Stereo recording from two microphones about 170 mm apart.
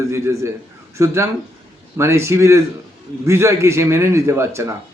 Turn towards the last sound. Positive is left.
turn(degrees=-15)  # may be behind; listen again after turning